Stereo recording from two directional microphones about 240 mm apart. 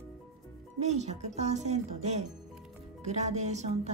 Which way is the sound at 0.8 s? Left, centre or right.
Right.